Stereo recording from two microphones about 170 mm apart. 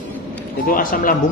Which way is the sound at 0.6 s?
55° left (ahead or behind).